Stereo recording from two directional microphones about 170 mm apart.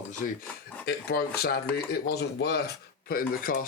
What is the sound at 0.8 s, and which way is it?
Speech, 70° left (ahead or behind).